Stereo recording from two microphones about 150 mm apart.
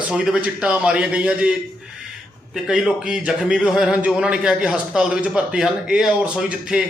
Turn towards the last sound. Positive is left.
turn(degrees=-5)  # may be behind; listen again after turning